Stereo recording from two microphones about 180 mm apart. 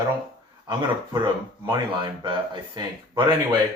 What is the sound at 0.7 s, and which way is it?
Speech, 25° right (ahead or behind).